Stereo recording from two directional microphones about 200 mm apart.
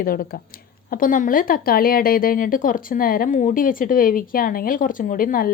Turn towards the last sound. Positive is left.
turn(degrees=45)  # may be behind; listen again after turning